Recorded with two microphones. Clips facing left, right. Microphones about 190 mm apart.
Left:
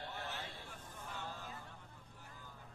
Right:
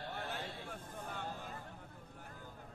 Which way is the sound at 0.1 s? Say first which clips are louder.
Right 3 dB; 55° right (ahead or behind).